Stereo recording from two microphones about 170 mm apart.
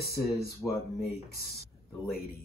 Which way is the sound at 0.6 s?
Centre (ahead or behind).